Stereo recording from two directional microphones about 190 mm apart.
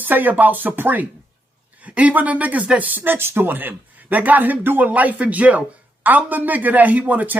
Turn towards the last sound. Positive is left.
turn(degrees=-10)  # may be behind; listen again after turning